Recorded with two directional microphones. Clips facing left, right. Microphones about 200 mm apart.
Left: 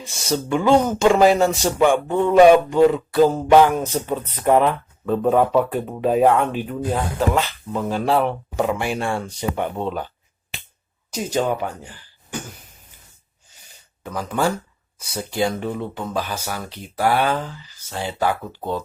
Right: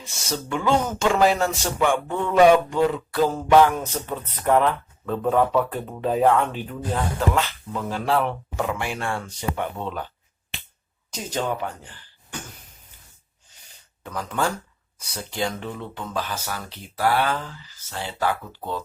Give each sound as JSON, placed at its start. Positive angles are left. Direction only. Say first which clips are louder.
{"t": 0.3, "sound": "a man's voice", "louder": "left 6 dB", "side_deg": 20}
{"t": 11.1, "sound": "speech", "louder": "left 5 dB", "side_deg": 10}
{"t": 14.0, "sound": "a man's voice", "louder": "left 4 dB", "side_deg": 10}